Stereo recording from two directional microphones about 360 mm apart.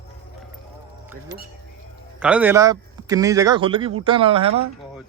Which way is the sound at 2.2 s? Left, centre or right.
Centre.